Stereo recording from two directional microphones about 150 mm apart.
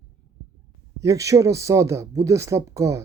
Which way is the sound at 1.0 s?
20° right (ahead or behind).